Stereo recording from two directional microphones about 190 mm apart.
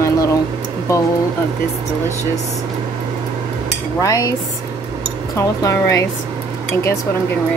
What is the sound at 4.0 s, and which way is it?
Speech, 15° left (ahead or behind).